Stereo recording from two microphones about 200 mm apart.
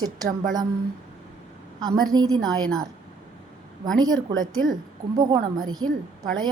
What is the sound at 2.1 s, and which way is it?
Speech, 20° right (ahead or behind).